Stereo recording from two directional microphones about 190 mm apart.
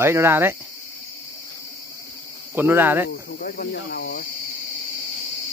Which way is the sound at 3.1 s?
50° left (ahead or behind).